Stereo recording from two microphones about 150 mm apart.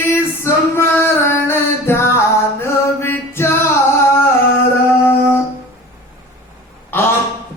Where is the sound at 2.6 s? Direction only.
15° left (ahead or behind).